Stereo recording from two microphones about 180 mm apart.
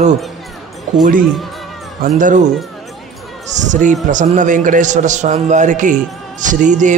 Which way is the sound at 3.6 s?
45° right (ahead or behind).